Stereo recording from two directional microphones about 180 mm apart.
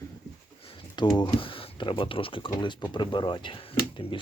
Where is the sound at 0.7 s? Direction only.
25° left (ahead or behind).